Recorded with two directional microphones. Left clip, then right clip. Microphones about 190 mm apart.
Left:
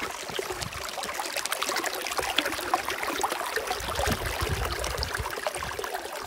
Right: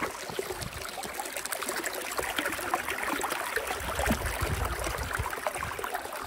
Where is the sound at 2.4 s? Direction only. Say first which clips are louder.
Left 4 dB; 45° left (ahead or behind).